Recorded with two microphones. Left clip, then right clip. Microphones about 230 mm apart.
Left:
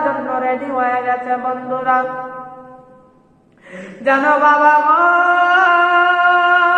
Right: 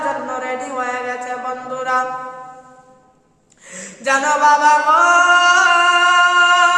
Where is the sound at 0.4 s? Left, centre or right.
Right.